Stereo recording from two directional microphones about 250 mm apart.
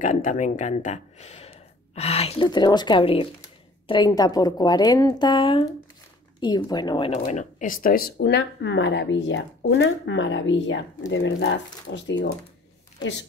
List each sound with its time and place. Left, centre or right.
0.0 s speech: left